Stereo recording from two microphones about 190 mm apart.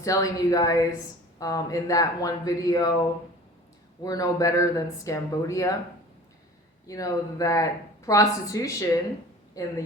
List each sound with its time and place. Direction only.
0.0 s speech: 20° left (ahead or behind)
6.8 s speech: 20° left (ahead or behind)